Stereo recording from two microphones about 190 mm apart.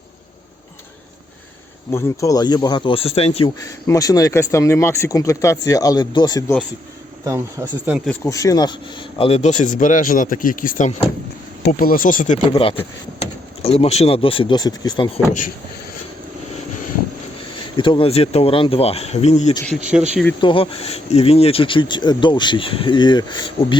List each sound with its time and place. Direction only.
1.9 s speech: 15° left (ahead or behind); by 3.5 s 30° left (ahead or behind)
3.6 s speech: 15° left (ahead or behind)
7.3 s speech: 15° right (ahead or behind)
8.0 s speech: 10° left (ahead or behind); by 12.4 s 40° left (ahead or behind)
12.5 s speech: 30° left (ahead or behind)
15.3 s speech: 45° left (ahead or behind)
17.7 s speech: 25° left (ahead or behind)